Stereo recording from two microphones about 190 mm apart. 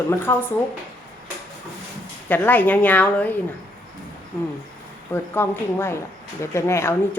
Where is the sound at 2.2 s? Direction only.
10° left (ahead or behind).